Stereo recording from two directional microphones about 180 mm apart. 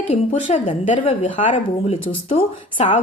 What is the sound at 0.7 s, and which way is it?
A woman's voice, 30° left (ahead or behind).